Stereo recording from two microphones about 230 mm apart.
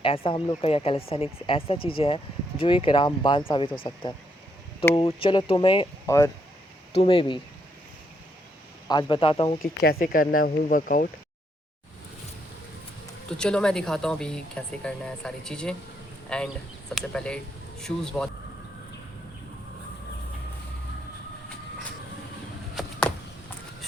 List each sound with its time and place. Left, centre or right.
0.0 s speech: left
6.9 s speech: left
8.9 s speech: centre
9.8 s speech: left
13.4 s speech: centre
22.7 s a sound: centre